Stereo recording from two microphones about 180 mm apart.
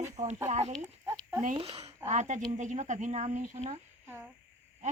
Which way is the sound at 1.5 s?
20° right (ahead or behind).